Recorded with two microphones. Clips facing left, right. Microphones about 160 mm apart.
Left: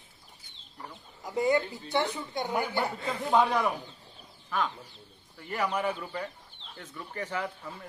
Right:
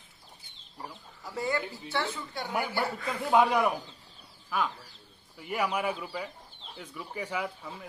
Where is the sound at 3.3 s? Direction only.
15° right (ahead or behind).